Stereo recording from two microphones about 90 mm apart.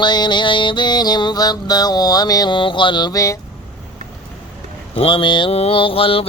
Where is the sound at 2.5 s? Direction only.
65° left (ahead or behind).